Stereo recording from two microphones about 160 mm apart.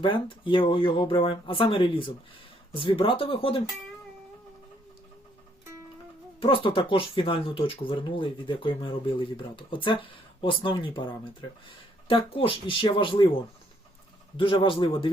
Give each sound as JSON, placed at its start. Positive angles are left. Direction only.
{"t": 0.0, "sound": "speech", "side_deg": 30}
{"t": 6.4, "sound": "speech", "side_deg": 35}
{"t": 14.3, "sound": "speech", "side_deg": 35}